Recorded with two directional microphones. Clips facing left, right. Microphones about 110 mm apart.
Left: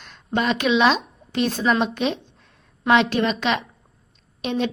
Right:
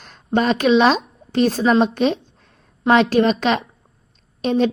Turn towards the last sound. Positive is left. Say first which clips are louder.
# right 6 dB
turn(degrees=-35)  # may be behind; listen again after turning